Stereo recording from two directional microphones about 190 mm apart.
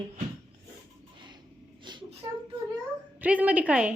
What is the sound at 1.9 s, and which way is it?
Speech, 25° right (ahead or behind).